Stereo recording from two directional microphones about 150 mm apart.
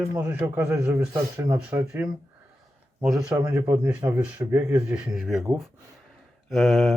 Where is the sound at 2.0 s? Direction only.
10° right (ahead or behind).